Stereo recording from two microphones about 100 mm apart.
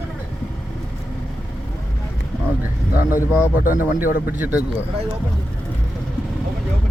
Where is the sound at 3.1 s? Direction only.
20° right (ahead or behind).